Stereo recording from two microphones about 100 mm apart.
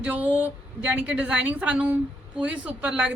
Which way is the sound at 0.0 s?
15° right (ahead or behind).